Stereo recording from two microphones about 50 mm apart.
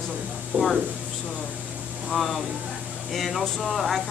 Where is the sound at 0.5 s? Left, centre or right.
Right.